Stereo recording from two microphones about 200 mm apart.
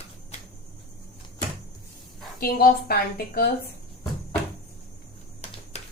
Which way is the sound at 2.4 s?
45° left (ahead or behind).